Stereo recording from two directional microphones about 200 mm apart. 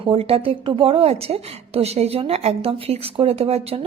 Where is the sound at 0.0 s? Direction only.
25° right (ahead or behind).